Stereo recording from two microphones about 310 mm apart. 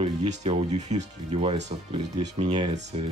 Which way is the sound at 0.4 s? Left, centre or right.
Right.